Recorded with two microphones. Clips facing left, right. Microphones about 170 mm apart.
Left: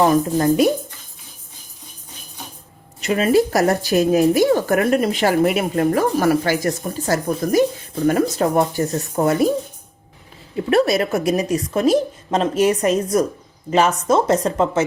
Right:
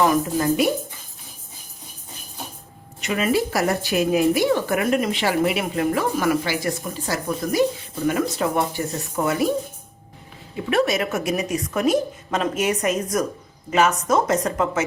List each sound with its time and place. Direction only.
0.0 s speech: 35° left (ahead or behind)
3.0 s speech: 35° left (ahead or behind)
10.7 s speech: 35° left (ahead or behind)